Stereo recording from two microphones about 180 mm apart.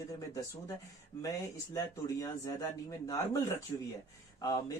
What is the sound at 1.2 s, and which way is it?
Speech, 20° left (ahead or behind).